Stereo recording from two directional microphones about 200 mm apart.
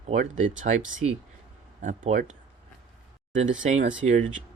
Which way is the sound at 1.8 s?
40° right (ahead or behind).